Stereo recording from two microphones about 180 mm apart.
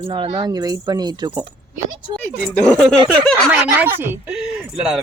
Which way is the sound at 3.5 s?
10° right (ahead or behind).